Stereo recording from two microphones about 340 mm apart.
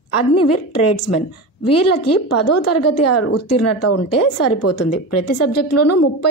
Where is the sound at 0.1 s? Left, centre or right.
Left.